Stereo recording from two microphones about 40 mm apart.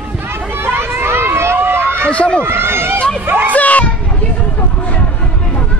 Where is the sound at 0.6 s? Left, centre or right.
Right.